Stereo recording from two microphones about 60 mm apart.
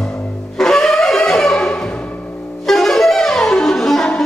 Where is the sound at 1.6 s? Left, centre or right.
Centre.